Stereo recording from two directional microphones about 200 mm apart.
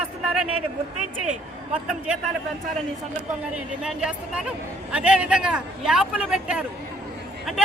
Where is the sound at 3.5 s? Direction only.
5° right (ahead or behind).